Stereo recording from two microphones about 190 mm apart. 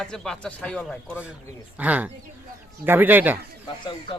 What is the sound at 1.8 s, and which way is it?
Speech, 5° right (ahead or behind).